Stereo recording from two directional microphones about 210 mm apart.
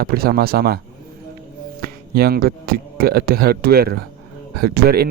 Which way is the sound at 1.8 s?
45° right (ahead or behind).